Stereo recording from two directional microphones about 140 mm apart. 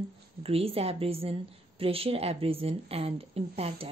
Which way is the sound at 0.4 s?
45° right (ahead or behind).